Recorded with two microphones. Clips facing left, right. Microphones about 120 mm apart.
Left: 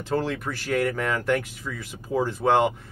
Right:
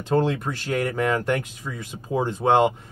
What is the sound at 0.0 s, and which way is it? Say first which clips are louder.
Speech: right 4 dB; 20° right (ahead or behind).